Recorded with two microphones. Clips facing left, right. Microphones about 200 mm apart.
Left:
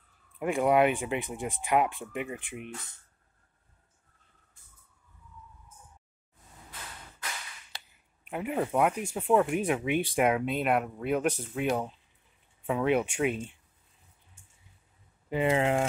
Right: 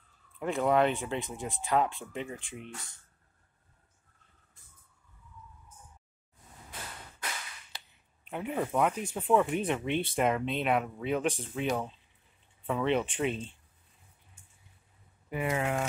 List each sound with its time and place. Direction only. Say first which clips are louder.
0.4 s speech: left 2 dB; 15° left (ahead or behind)
8.3 s speech: left 2 dB; 5° left (ahead or behind)
15.2 s speech: left 5 dB; 25° left (ahead or behind)